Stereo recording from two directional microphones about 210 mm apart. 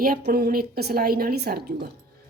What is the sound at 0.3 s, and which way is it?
A woman's voice, 45° right (ahead or behind).